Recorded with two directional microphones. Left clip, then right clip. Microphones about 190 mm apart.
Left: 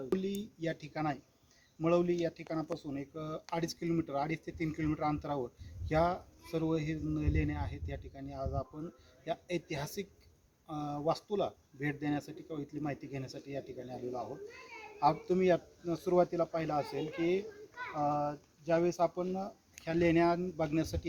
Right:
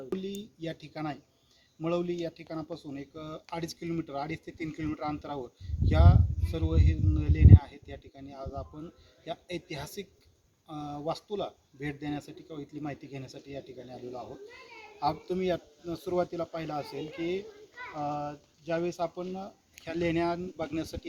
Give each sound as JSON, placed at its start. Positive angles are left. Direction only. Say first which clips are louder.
{"t": 0.2, "sound": "a sound", "louder": "even", "side_deg": 15}
{"t": 1.8, "sound": "speech", "louder": "left 1 dB", "side_deg": 15}
{"t": 17.9, "sound": "speech", "louder": "left 1 dB", "side_deg": 10}